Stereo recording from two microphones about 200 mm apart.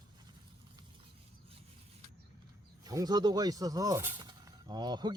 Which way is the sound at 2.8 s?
20° right (ahead or behind).